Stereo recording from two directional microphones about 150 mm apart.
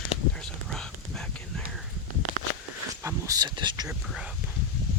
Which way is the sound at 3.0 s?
20° right (ahead or behind).